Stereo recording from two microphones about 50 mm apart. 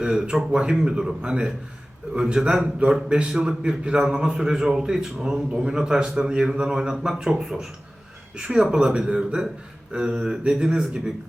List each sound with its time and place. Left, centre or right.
0.0 s a man's voice: centre